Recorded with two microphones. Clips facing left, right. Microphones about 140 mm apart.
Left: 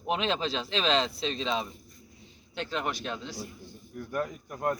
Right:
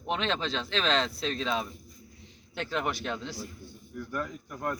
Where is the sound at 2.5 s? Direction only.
15° left (ahead or behind).